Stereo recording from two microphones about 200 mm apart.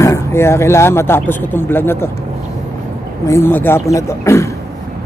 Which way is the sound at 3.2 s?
10° left (ahead or behind).